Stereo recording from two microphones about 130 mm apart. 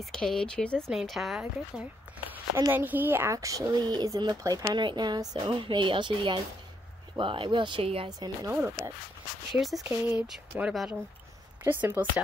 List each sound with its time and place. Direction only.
0.0 s speech: 5° left (ahead or behind)
2.5 s speech: 15° right (ahead or behind)
4.7 s a woman's voice: 35° right (ahead or behind)
8.5 s speech: 20° right (ahead or behind)
9.5 s speech: centre (ahead or behind)
9.8 s a woman's voice: 15° right (ahead or behind)
11.6 s a woman's voice: 15° right (ahead or behind)